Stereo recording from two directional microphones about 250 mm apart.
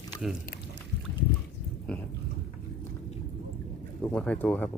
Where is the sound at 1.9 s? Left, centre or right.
Centre.